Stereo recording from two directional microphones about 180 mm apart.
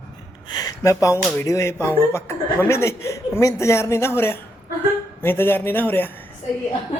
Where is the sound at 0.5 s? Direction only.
20° left (ahead or behind).